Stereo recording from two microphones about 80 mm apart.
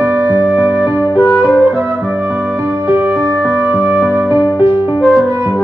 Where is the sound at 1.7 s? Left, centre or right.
Right.